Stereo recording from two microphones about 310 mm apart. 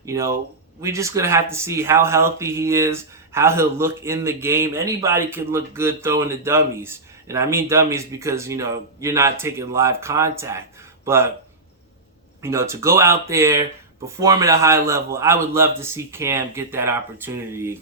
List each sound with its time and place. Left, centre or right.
0.0 s speech: centre
12.4 s speech: centre